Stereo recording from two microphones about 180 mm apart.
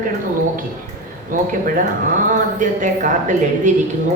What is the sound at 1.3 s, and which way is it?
A woman's voice, 50° right (ahead or behind).